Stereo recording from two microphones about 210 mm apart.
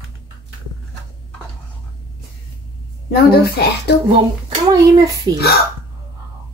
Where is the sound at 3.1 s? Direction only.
50° left (ahead or behind).